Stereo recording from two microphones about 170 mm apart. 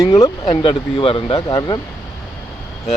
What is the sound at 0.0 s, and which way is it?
Speech, 20° left (ahead or behind).